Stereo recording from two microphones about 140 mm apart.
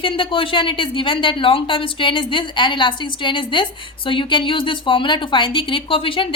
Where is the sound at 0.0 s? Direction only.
40° left (ahead or behind).